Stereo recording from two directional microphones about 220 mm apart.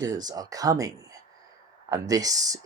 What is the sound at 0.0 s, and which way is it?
Speech, 20° right (ahead or behind).